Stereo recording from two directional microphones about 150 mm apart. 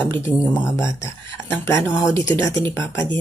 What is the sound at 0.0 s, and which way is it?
Speech, 15° left (ahead or behind).